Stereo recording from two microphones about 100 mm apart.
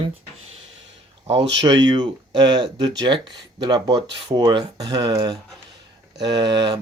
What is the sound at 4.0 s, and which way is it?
Speech, 65° right (ahead or behind).